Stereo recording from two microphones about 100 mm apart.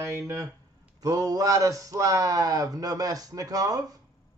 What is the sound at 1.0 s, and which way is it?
Speech, 40° right (ahead or behind).